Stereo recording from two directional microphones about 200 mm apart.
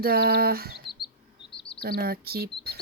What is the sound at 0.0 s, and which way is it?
Speech, 50° right (ahead or behind).